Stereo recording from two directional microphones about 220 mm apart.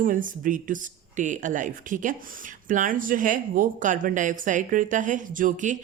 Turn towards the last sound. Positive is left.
turn(degrees=-35)  # may be behind; listen again after turning